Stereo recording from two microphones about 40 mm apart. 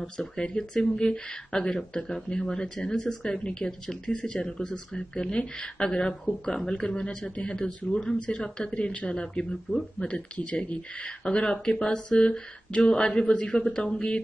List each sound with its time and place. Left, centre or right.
0.0 s speech: centre
3.4 s speech: left
7.3 s speech: left
13.6 s speech: centre